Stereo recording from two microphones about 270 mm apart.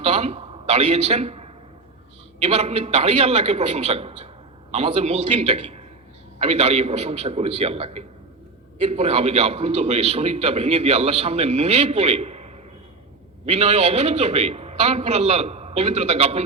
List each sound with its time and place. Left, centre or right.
0.0 s a man's voice: right